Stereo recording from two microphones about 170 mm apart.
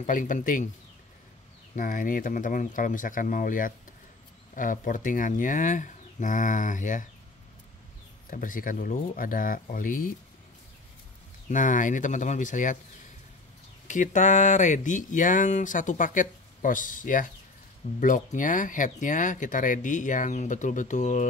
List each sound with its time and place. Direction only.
0.0 s speech: 50° left (ahead or behind)
1.8 s speech: 55° left (ahead or behind)
8.3 s speech: 50° left (ahead or behind)
11.4 s speech: 50° left (ahead or behind)
13.8 s speech: 45° left (ahead or behind)